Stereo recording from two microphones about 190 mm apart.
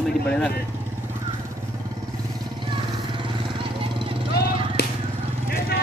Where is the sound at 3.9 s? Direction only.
25° right (ahead or behind).